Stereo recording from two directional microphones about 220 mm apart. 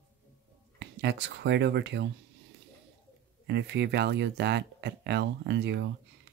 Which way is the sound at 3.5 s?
50° right (ahead or behind).